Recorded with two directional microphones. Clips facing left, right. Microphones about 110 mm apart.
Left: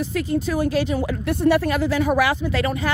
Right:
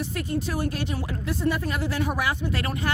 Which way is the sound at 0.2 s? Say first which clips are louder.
Left 6 dB; 90° left.